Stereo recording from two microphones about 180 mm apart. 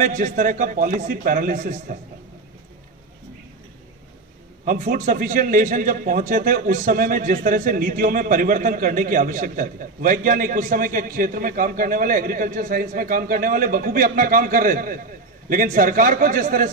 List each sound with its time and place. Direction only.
0.0 s a man's voice: 45° right (ahead or behind)
4.6 s a man's voice: 50° right (ahead or behind)